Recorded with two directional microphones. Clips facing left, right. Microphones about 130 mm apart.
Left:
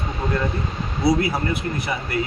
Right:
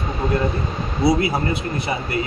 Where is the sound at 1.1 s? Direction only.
25° right (ahead or behind).